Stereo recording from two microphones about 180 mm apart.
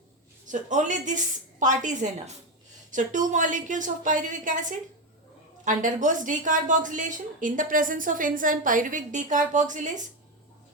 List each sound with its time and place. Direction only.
0.4 s a woman's voice: 45° right (ahead or behind)